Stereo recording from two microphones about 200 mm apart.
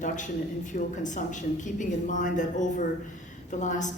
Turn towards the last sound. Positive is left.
turn(degrees=40)  # may be behind; listen again after turning